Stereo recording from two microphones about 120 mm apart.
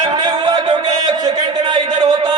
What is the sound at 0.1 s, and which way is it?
Music, 35° right (ahead or behind).